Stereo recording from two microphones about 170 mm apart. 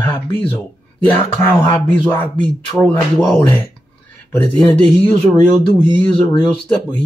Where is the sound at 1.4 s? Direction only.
15° left (ahead or behind).